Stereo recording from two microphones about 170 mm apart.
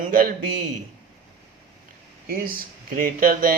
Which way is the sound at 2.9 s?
55° right (ahead or behind).